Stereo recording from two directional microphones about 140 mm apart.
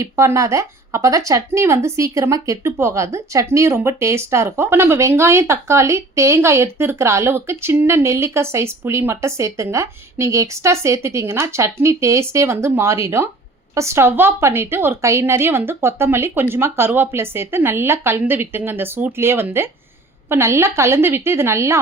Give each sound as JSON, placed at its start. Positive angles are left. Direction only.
{"t": 0.0, "sound": "a woman's voice", "side_deg": -20}